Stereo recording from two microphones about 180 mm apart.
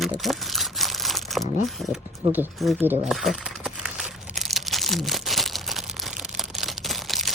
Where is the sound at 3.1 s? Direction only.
Centre (ahead or behind).